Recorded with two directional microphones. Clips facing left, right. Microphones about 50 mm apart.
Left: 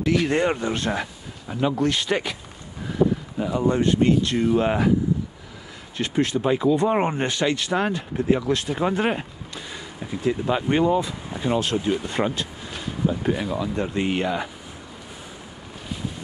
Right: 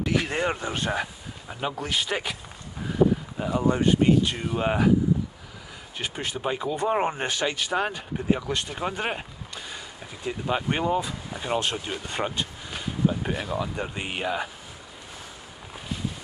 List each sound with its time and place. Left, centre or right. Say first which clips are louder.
0.0 s speech: left 5 dB; centre
6.1 s speech: left 9 dB; centre
7.2 s speech: left 4 dB; centre
11.8 s speech: left 6 dB; centre